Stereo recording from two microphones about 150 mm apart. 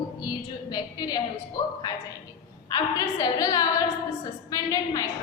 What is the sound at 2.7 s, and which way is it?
A woman's voice, 25° left (ahead or behind).